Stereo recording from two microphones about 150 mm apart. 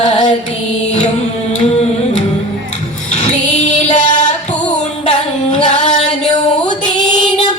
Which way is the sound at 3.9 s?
55° left (ahead or behind).